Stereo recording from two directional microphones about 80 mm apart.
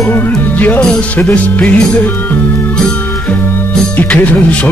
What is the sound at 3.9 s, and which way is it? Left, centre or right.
Speech, centre.